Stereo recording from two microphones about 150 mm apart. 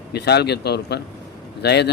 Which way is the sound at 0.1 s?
90° left.